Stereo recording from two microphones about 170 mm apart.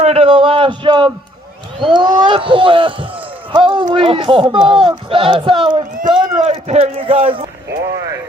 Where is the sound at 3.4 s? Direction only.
30° right (ahead or behind).